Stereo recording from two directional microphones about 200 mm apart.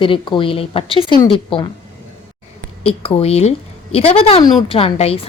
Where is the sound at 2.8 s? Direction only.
30° left (ahead or behind).